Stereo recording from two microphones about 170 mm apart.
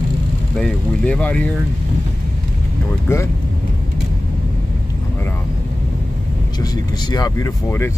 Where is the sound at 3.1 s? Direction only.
15° left (ahead or behind).